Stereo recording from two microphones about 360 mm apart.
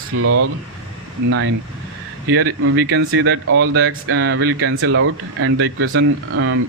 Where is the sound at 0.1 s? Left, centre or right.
Right.